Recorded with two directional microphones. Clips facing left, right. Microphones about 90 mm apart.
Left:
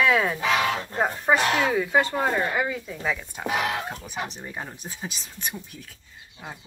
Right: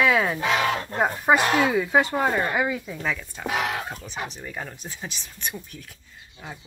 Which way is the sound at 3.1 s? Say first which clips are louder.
Left 1 dB; 15° left (ahead or behind).